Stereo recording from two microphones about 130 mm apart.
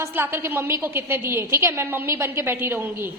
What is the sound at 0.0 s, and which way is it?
A woman's voice, 15° right (ahead or behind).